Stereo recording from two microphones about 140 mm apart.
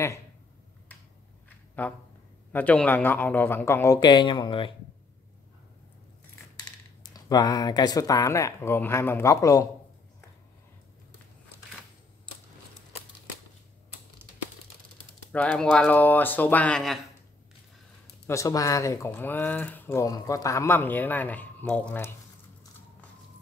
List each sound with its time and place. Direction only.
1.8 s speech: 15° left (ahead or behind); by 4.7 s 35° left (ahead or behind)
7.0 s speech: 30° left (ahead or behind)
15.3 s speech: 10° left (ahead or behind)
18.2 s speech: 20° left (ahead or behind)